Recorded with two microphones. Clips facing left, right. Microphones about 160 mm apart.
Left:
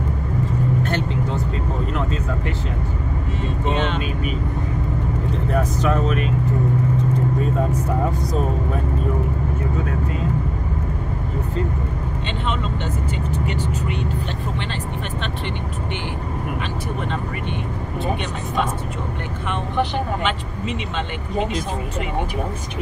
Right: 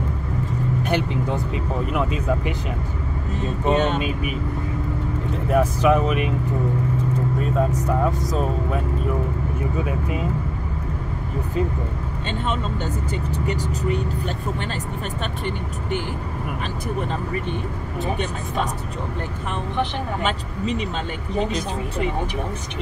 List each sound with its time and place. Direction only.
0.8 s vehicle: 10° right (ahead or behind)
3.7 s speech: 45° right (ahead or behind)
5.5 s speech: 10° right (ahead or behind)
7.3 s speech: centre (ahead or behind)
13.5 s speech: 40° right (ahead or behind)